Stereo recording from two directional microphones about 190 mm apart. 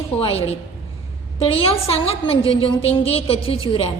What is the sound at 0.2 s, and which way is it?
A woman's voice, 30° left (ahead or behind).